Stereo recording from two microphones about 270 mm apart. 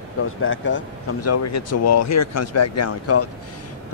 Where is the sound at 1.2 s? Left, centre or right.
Left.